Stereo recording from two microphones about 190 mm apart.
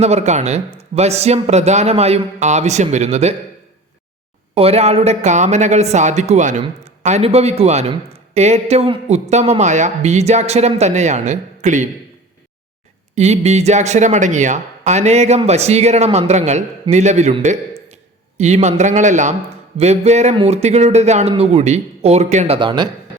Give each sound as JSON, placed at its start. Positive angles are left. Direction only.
{"t": 0.0, "sound": "speech", "side_deg": -35}
{"t": 4.5, "sound": "speech", "side_deg": -30}
{"t": 13.1, "sound": "speech", "side_deg": -35}